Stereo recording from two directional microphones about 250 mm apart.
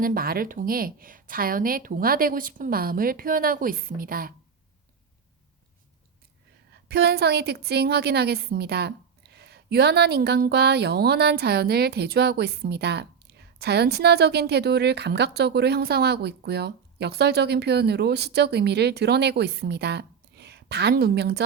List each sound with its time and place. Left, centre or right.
0.0 s a woman's voice: right
6.8 s a woman's voice: right